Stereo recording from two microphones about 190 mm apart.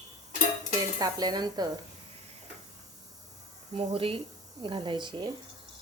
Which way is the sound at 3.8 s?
30° right (ahead or behind).